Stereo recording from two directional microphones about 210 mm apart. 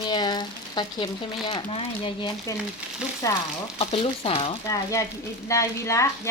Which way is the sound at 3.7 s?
25° left (ahead or behind).